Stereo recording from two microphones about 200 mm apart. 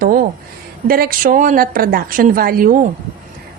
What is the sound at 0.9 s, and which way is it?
A woman's voice, 45° right (ahead or behind).